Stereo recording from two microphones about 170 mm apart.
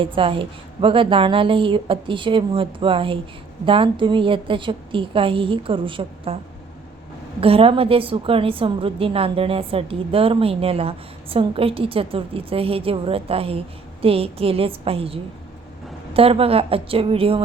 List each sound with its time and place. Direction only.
0.0 s a woman's voice: 30° right (ahead or behind)
7.4 s a woman's voice: 35° right (ahead or behind)